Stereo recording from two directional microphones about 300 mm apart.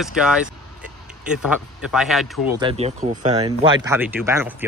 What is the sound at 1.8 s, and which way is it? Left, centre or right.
Speech, centre.